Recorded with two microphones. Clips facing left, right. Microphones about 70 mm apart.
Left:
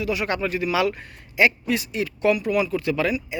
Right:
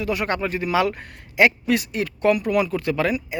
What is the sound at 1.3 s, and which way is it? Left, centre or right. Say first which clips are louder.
Speech: right 2 dB; right.